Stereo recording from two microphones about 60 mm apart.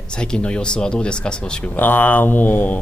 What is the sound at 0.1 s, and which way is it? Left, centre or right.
Speech, centre.